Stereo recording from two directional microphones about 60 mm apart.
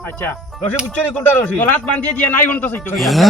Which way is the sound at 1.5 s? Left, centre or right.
Left.